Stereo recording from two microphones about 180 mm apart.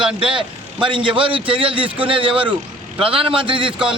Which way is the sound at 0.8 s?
25° right (ahead or behind).